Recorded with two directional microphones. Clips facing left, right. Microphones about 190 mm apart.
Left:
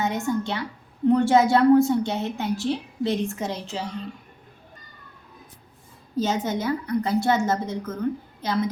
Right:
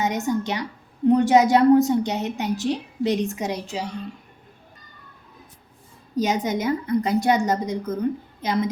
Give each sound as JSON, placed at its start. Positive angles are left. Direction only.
{"t": 0.0, "sound": "a woman's voice", "side_deg": -20}
{"t": 6.1, "sound": "a woman's voice", "side_deg": -15}